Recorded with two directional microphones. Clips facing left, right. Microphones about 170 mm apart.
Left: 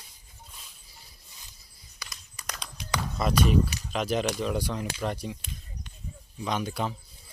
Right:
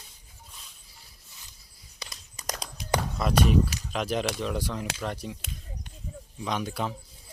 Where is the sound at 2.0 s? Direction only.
35° right (ahead or behind).